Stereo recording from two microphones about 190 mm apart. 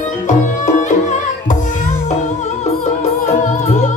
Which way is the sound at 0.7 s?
40° left (ahead or behind).